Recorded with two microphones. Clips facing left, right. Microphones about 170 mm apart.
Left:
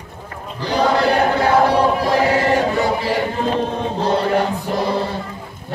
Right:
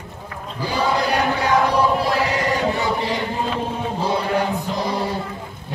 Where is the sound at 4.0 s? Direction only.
10° right (ahead or behind).